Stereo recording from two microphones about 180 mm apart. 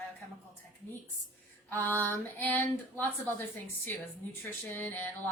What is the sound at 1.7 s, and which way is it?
Speech, 10° left (ahead or behind).